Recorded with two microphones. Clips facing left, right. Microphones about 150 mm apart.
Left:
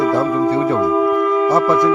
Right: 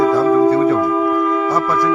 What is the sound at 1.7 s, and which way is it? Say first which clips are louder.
Speech: left 3 dB; 20° left (ahead or behind).